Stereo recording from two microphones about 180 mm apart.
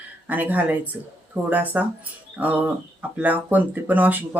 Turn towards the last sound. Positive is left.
turn(degrees=-10)  # may be behind; listen again after turning